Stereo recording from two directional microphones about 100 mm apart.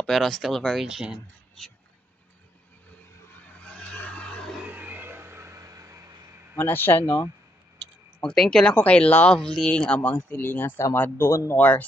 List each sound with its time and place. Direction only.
0.0 s speech: 5° left (ahead or behind)
1.6 s speech: 5° left (ahead or behind)
3.5 s neigh: 10° left (ahead or behind)
4.6 s vehicle: 15° right (ahead or behind); by 6.3 s 30° right (ahead or behind)
6.5 s speech: 20° left (ahead or behind)
8.2 s speech: 10° left (ahead or behind); by 11.5 s 25° left (ahead or behind)
11.5 s speech: 15° left (ahead or behind)